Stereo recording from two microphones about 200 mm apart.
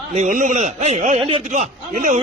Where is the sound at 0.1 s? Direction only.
40° right (ahead or behind).